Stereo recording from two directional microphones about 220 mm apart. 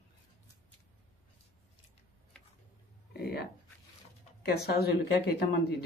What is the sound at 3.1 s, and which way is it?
Speech, 45° left (ahead or behind).